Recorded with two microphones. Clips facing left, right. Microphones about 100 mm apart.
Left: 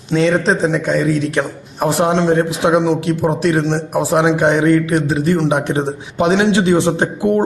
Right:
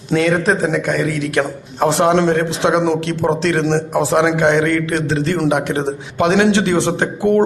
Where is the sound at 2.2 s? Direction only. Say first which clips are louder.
Left 1 dB; 20° left (ahead or behind).